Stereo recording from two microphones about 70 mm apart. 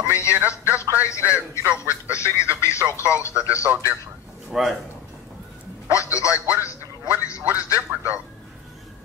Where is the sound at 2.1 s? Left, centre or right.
Left.